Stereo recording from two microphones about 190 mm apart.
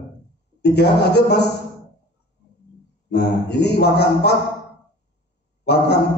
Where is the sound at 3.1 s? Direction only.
60° left (ahead or behind).